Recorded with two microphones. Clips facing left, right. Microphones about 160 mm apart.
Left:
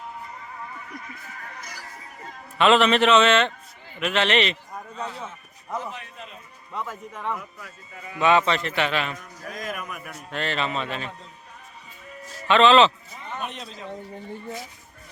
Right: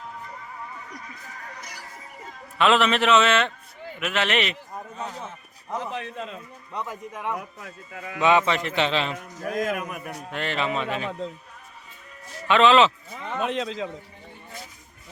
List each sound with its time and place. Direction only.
2.2 s a man's voice: centre (ahead or behind)
5.9 s a man's voice: 90° right
6.7 s a man's voice: 15° right (ahead or behind)
9.4 s a man's voice: 50° right (ahead or behind)
10.0 s a man's voice: 35° right (ahead or behind)
10.3 s a man's voice: 15° right (ahead or behind)
12.5 s a man's voice: 10° right (ahead or behind)
13.2 s a man's voice: 90° right